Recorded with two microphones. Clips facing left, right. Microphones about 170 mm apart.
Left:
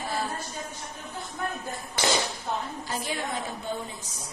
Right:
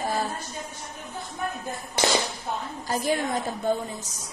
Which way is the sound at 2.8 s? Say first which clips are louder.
Right 6 dB; 45° right (ahead or behind).